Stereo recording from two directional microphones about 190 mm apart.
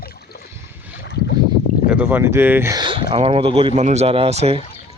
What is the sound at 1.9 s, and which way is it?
Speech, 10° right (ahead or behind).